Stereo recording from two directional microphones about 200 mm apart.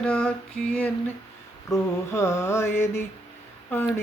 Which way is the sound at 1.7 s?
15° left (ahead or behind).